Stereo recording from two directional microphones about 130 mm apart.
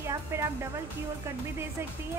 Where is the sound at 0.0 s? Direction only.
20° right (ahead or behind).